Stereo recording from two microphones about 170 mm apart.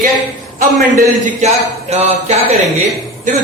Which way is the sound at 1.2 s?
40° right (ahead or behind).